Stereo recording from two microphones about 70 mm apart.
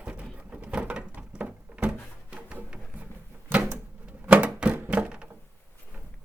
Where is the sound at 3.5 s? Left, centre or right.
Right.